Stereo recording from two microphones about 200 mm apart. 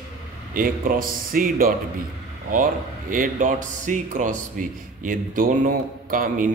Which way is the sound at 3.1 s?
40° right (ahead or behind).